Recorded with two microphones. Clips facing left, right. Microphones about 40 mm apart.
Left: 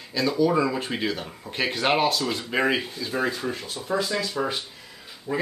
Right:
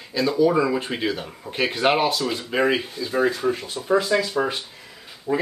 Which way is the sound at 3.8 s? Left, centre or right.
Right.